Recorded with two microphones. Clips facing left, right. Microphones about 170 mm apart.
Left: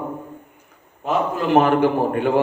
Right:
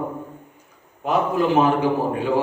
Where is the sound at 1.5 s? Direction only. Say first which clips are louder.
Left 5 dB; 60° left (ahead or behind).